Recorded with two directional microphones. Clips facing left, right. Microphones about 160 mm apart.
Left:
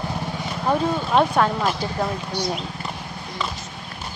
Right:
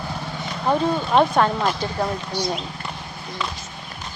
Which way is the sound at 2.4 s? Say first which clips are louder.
Even; 5° left (ahead or behind).